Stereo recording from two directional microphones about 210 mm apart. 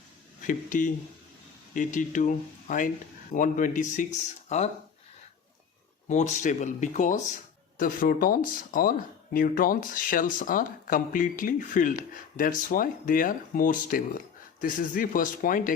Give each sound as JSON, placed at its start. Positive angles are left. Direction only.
{"t": 0.4, "sound": "speech", "side_deg": 40}
{"t": 6.1, "sound": "speech", "side_deg": 35}